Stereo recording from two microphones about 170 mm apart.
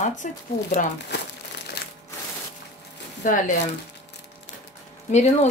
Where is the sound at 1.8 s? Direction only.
70° left (ahead or behind).